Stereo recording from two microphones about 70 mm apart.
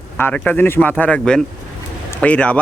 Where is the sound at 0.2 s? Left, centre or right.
Left.